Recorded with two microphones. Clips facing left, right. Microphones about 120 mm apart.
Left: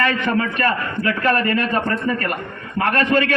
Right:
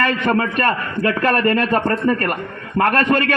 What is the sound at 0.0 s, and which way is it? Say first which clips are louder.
A man's voice: right 2 dB; 50° right (ahead or behind).